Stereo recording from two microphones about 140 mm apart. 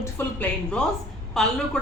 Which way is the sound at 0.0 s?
15° left (ahead or behind).